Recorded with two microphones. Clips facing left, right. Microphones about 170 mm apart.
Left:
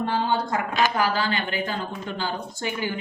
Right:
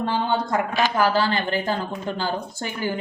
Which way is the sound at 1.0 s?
40° right (ahead or behind).